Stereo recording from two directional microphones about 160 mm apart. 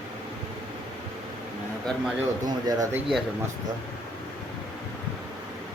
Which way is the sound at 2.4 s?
25° right (ahead or behind).